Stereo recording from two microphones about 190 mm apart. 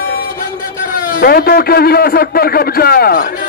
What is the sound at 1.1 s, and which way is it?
A man's voice, 50° left (ahead or behind).